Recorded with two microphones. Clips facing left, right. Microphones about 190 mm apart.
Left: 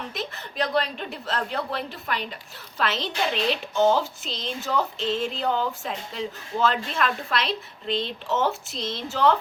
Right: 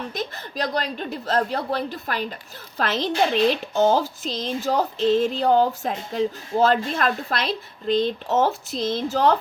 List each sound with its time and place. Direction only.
0.2 s speech: 40° right (ahead or behind)